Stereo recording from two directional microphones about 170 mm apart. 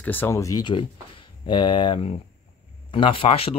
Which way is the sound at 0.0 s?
10° left (ahead or behind).